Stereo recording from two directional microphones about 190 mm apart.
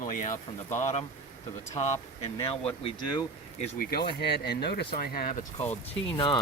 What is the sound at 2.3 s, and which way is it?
Speech, 30° left (ahead or behind).